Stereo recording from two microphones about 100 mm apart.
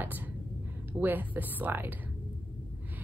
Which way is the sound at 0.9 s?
20° right (ahead or behind).